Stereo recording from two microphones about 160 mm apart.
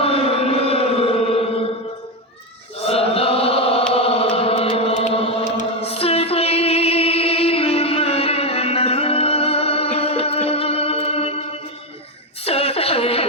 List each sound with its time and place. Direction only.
0.0 s chant: 35° left (ahead or behind)
2.8 s chant: 35° left (ahead or behind)
5.5 s music: 40° left (ahead or behind)
12.5 s a sound: 40° left (ahead or behind)